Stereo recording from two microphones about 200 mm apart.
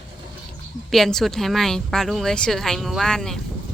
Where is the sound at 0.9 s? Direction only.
Centre (ahead or behind).